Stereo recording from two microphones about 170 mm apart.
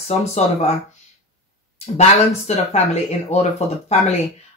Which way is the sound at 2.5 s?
40° left (ahead or behind).